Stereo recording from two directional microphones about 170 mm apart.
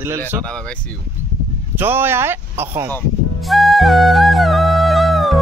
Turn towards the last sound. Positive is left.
turn(degrees=0)  # may be behind; listen again after turning